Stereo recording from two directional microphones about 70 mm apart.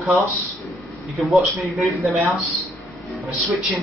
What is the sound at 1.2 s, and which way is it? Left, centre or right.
Speech, centre.